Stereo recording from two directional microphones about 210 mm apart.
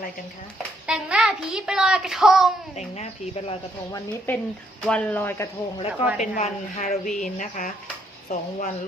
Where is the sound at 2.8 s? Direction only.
30° left (ahead or behind).